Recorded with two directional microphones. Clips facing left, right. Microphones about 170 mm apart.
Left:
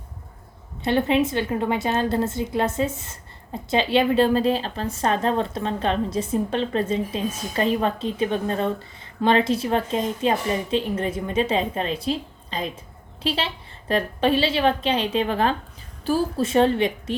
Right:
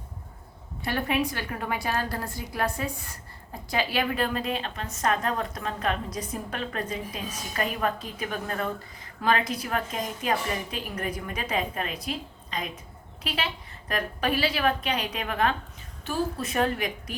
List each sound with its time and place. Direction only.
0.9 s a woman's voice: 25° left (ahead or behind)